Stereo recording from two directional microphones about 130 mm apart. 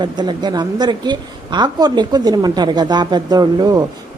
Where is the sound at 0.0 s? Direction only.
35° right (ahead or behind).